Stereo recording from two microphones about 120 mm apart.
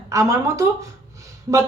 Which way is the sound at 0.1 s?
25° right (ahead or behind).